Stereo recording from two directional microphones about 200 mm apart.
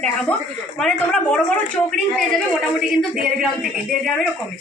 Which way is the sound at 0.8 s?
5° left (ahead or behind).